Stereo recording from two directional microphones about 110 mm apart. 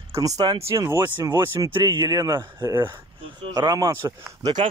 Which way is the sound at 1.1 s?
45° right (ahead or behind).